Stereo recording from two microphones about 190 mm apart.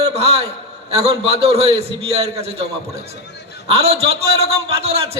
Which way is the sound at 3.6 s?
30° right (ahead or behind).